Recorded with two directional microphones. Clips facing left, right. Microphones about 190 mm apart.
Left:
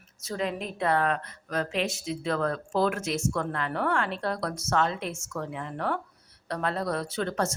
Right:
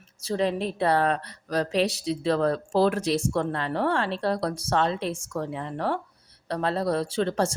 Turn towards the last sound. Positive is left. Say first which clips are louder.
# right 4 dB
turn(degrees=-30)  # may be behind; listen again after turning